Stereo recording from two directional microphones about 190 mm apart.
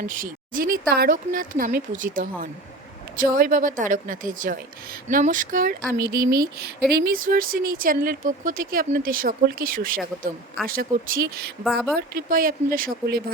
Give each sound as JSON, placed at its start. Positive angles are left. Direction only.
{"t": 0.1, "sound": "speech", "side_deg": -45}